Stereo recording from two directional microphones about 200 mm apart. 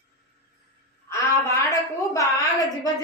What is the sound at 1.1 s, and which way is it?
A woman's voice, 15° left (ahead or behind).